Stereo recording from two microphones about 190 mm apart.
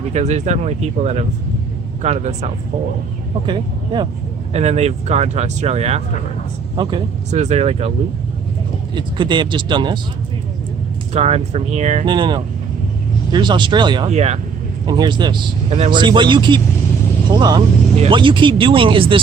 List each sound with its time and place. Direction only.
0.1 s speech: 35° right (ahead or behind)
3.4 s a man's voice: 25° right (ahead or behind)
4.5 s speech: 35° right (ahead or behind)
7.3 s speech: 35° right (ahead or behind)
9.0 s a man's voice: 25° right (ahead or behind)
11.1 s speech: 35° right (ahead or behind)
12.0 s a man's voice: 25° right (ahead or behind)
14.1 s speech: 35° right (ahead or behind)
14.8 s a man's voice: 25° right (ahead or behind)